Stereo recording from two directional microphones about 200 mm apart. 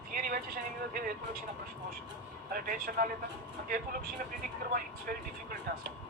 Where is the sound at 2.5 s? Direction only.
45° right (ahead or behind).